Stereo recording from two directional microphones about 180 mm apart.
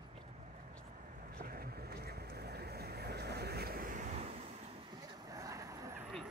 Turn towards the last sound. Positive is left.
turn(degrees=-15)  # may be behind; listen again after turning